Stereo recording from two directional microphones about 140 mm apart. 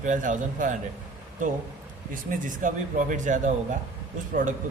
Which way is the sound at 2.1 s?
70° right (ahead or behind).